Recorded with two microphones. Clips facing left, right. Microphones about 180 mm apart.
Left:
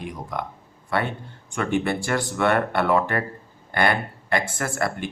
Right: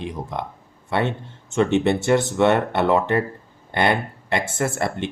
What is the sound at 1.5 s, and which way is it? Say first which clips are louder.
Speech: right 5 dB; 25° right (ahead or behind).